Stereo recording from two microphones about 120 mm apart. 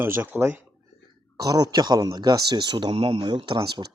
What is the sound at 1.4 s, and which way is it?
Speech, 35° right (ahead or behind).